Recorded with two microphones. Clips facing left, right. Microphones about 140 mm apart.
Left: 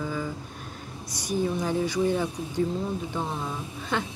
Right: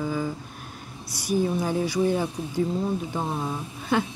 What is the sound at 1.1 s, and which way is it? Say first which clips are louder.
Speech: right 3 dB; 10° right (ahead or behind).